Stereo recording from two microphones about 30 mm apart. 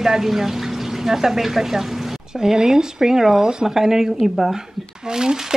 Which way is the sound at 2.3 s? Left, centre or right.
Right.